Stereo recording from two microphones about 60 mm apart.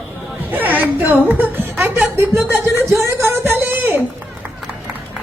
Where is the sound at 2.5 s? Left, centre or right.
Right.